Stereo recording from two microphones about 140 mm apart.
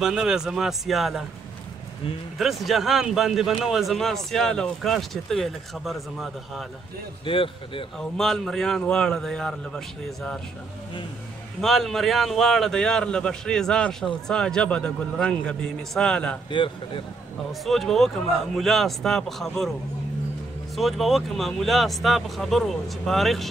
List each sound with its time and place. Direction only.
0.0 s speech: 5° right (ahead or behind)
2.3 s speech: centre (ahead or behind)
7.2 s a man's voice: 40° left (ahead or behind)
8.0 s speech: 5° left (ahead or behind)
11.6 s speech: centre (ahead or behind)
16.4 s a man's voice: 35° left (ahead or behind)
17.5 s speech: centre (ahead or behind)
20.7 s speech: centre (ahead or behind)